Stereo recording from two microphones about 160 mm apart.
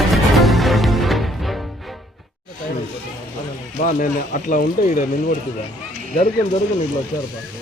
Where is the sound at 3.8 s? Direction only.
55° left (ahead or behind).